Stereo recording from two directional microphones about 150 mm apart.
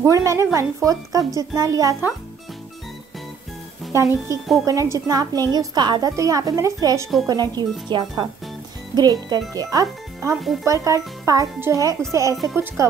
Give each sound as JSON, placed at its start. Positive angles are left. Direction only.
{"t": 0.0, "sound": "a woman's voice", "side_deg": -20}
{"t": 3.9, "sound": "a woman's voice", "side_deg": -20}
{"t": 10.3, "sound": "speech", "side_deg": 0}
{"t": 10.6, "sound": "a woman's voice", "side_deg": -20}